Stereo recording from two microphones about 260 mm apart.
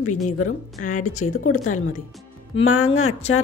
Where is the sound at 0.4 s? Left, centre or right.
Left.